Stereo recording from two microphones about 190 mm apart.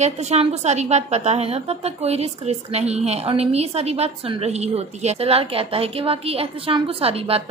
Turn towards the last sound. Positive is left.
turn(degrees=-30)  # may be behind; listen again after turning